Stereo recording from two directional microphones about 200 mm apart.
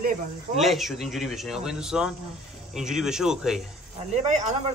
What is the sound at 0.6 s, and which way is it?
A man's voice, centre (ahead or behind).